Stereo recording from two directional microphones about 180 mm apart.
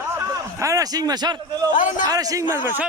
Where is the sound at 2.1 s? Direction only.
20° right (ahead or behind).